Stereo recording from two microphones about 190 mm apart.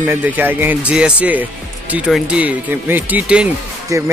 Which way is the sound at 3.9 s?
15° right (ahead or behind).